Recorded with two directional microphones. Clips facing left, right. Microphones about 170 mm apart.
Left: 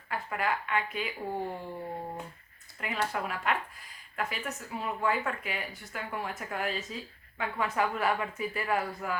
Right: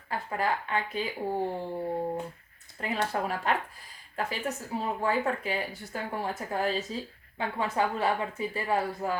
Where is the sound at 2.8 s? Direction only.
35° right (ahead or behind).